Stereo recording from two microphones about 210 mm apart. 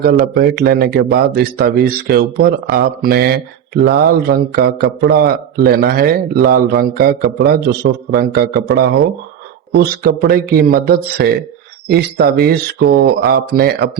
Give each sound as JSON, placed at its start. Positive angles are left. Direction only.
{"t": 0.0, "sound": "a man's voice", "side_deg": -50}